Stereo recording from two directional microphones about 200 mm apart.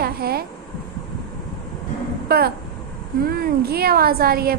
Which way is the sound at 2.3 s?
50° right (ahead or behind).